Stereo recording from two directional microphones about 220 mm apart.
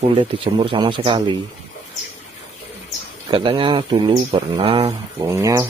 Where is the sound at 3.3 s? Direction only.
20° right (ahead or behind).